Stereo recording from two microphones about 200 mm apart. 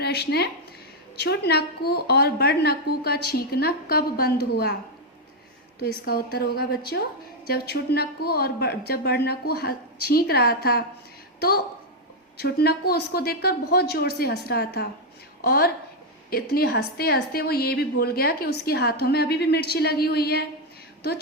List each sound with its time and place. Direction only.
0.0 s a woman's voice: 55° left (ahead or behind)
6.1 s a woman's voice: 50° left (ahead or behind)